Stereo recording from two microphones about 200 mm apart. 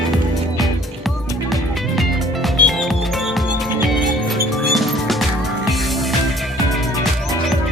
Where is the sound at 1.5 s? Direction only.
Centre (ahead or behind).